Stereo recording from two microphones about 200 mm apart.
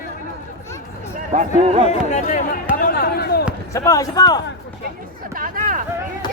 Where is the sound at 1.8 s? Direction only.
35° left (ahead or behind).